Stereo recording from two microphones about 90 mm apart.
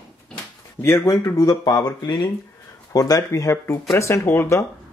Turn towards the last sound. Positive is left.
turn(degrees=30)  # may be behind; listen again after turning